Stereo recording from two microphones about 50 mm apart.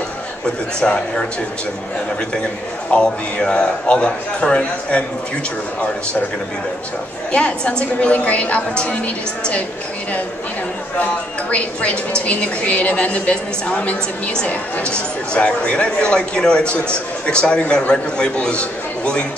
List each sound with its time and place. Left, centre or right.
0.7 s a man's voice: centre
2.9 s a man's voice: centre
7.3 s a man's voice: left
11.5 s a man's voice: left